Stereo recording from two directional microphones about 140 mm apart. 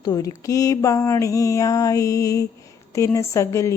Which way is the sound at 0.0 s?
25° left (ahead or behind).